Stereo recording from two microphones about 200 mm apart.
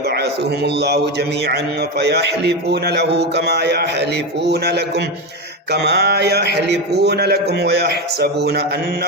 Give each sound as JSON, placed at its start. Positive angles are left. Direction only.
{"t": 0.2, "sound": "a man's voice", "side_deg": -55}